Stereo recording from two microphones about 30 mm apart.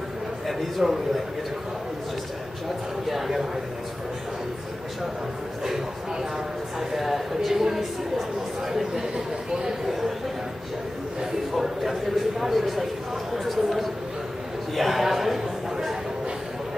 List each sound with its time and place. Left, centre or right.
0.5 s speech: centre
3.1 s a woman's voice: centre
6.9 s a woman's voice: centre
9.1 s speech: right
9.8 s speech: centre
11.8 s speech: centre
14.8 s a sound: centre